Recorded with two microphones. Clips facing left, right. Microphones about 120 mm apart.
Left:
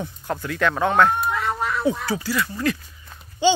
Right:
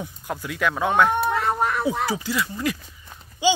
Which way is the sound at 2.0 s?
15° right (ahead or behind).